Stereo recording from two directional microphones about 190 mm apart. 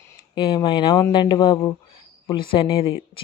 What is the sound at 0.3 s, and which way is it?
Speech, 25° left (ahead or behind).